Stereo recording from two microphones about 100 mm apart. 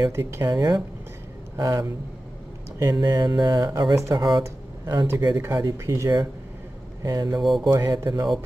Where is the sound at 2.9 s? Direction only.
45° right (ahead or behind).